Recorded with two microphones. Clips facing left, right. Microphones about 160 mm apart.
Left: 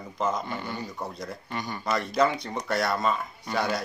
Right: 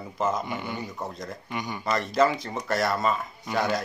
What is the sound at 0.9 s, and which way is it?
Speech, centre (ahead or behind).